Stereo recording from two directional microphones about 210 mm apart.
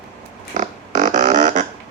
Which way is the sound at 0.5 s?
35° right (ahead or behind).